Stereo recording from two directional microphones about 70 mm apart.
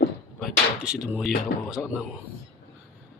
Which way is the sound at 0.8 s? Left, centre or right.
Centre.